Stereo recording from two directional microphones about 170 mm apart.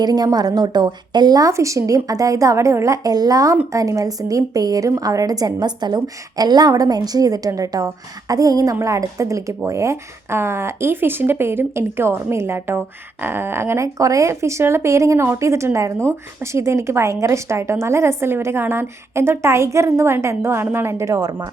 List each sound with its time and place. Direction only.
0.0 s a woman's voice: 25° right (ahead or behind)